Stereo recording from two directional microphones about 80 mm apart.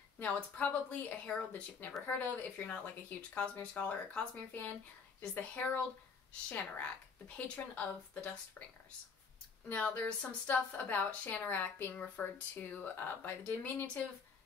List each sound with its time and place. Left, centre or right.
0.2 s a woman's voice: centre
7.3 s speech: centre
9.7 s a woman's voice: left